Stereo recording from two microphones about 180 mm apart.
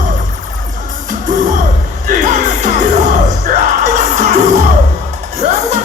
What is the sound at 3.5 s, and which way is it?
Music, 45° right (ahead or behind).